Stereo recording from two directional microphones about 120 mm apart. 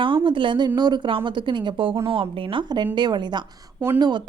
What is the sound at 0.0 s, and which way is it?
A woman's voice, 45° right (ahead or behind).